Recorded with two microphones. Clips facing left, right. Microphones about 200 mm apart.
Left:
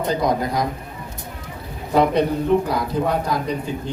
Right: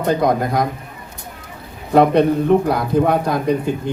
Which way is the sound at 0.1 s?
55° right (ahead or behind).